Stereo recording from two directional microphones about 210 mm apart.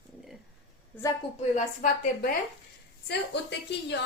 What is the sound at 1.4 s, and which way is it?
Speech, 35° left (ahead or behind).